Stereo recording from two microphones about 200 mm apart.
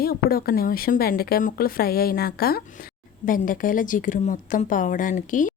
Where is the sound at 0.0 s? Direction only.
50° left (ahead or behind).